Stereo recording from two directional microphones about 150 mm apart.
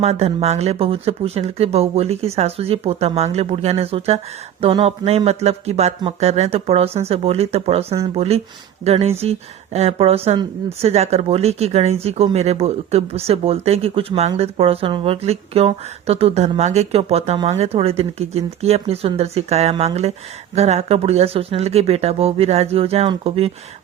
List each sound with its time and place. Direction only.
0.0 s speech: 45° right (ahead or behind)